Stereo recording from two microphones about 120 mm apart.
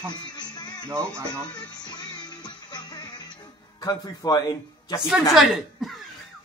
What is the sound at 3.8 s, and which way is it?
Speech, 30° left (ahead or behind).